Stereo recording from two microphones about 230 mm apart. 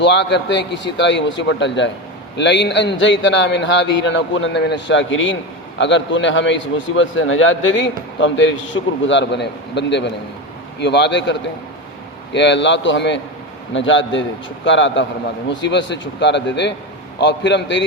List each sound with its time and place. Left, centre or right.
0.0 s a man's voice: left